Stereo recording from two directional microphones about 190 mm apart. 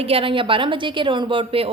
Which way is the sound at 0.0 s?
30° right (ahead or behind).